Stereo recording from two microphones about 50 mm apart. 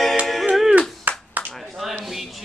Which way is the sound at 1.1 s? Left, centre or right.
Right.